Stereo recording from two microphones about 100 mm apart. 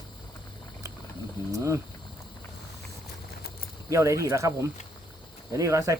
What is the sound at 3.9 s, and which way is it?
Speech, 30° right (ahead or behind).